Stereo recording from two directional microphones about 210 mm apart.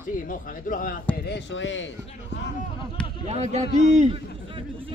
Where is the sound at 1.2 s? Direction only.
55° left (ahead or behind).